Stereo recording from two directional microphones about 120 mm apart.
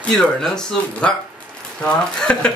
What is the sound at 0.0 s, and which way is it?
Speech, 5° left (ahead or behind).